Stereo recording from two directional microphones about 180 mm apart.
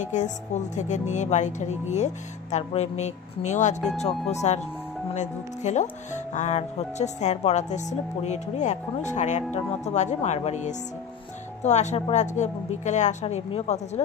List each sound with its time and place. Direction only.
0.0 s speech: 40° left (ahead or behind)